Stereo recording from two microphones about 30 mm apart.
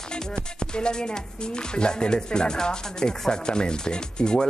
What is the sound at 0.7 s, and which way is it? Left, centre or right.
Speech, left.